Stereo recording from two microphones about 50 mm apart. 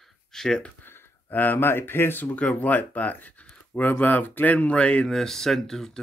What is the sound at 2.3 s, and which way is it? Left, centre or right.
Speech, left.